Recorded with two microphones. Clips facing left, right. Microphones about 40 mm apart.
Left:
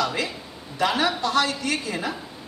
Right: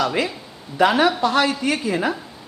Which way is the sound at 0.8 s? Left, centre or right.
Centre.